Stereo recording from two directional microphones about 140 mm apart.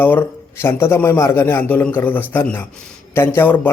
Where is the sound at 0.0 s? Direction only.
15° left (ahead or behind).